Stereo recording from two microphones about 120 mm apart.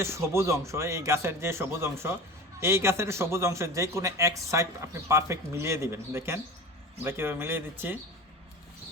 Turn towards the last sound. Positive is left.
turn(degrees=-20)  # may be behind; listen again after turning